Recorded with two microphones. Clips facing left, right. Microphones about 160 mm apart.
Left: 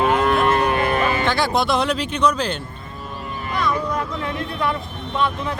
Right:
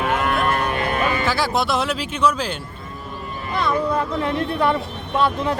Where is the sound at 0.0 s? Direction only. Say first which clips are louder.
Left 3 dB; 30° left (ahead or behind).